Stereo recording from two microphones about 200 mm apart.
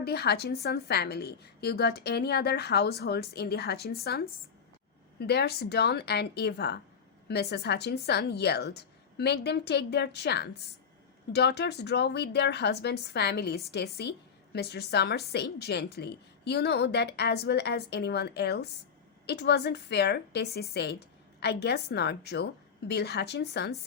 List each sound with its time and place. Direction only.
0.0 s a woman's voice: 55° left (ahead or behind)